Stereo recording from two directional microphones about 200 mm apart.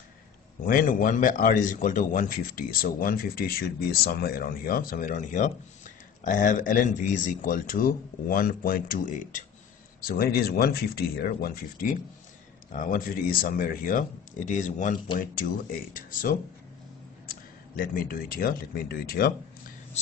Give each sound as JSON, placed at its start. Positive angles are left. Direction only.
{"t": 0.7, "sound": "a man's voice", "side_deg": 45}